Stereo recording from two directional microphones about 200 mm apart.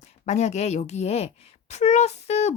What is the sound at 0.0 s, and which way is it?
A woman's voice, 35° left (ahead or behind).